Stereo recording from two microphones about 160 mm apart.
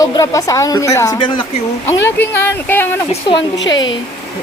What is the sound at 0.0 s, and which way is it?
A woman's voice, 20° left (ahead or behind).